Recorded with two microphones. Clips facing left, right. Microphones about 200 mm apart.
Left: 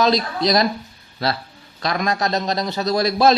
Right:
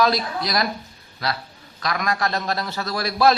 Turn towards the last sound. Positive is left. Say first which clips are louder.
# left 3 dB
turn(degrees=20)  # may be behind; listen again after turning